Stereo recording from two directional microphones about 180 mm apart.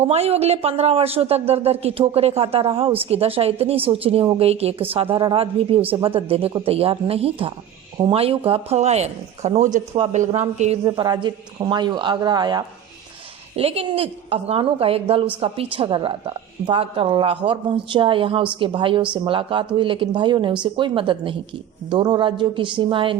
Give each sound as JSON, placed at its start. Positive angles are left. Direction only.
{"t": 0.0, "sound": "speech", "side_deg": -35}
{"t": 10.8, "sound": "a woman's voice", "side_deg": -20}